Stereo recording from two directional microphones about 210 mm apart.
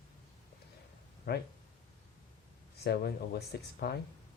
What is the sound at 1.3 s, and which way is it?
Speech, 50° left (ahead or behind).